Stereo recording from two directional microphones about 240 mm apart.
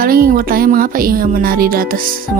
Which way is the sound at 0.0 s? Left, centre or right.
Right.